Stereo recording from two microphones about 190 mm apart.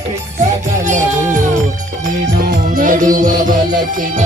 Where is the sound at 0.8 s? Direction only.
40° right (ahead or behind).